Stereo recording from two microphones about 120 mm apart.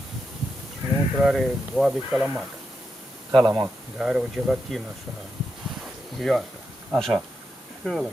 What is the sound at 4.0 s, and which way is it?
Speech, 5° right (ahead or behind).